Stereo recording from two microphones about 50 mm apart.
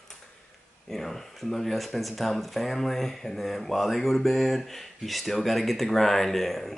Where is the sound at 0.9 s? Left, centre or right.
Centre.